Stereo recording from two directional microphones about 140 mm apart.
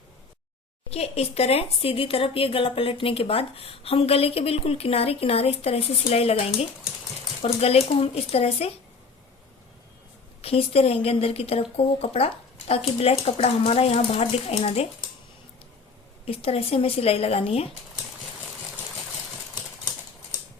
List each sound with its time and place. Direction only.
0.9 s speech: 45° left (ahead or behind)
10.4 s speech: 45° left (ahead or behind)
16.2 s speech: 45° left (ahead or behind)